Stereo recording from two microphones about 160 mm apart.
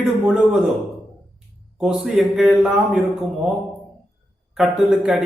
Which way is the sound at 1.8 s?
5° right (ahead or behind).